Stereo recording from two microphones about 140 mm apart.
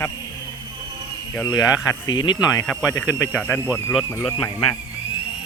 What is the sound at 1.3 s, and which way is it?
Speech, 25° left (ahead or behind).